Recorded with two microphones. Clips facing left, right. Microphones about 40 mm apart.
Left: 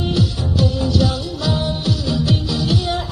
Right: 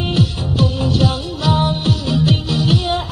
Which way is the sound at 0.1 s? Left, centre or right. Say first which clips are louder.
Right 1 dB; right.